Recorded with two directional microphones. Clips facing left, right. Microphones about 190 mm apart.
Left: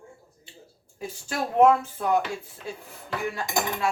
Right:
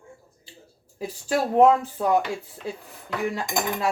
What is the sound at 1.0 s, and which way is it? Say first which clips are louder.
Speech: right 6 dB; 35° right (ahead or behind).